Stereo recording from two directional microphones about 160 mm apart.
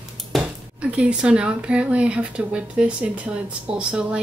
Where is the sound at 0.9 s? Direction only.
5° right (ahead or behind).